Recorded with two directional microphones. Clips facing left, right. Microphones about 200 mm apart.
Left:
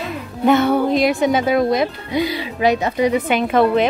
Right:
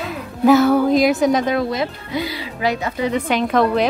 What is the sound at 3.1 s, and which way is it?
Speech, 5° left (ahead or behind).